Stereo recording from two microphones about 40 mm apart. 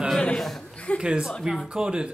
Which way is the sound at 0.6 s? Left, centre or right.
Left.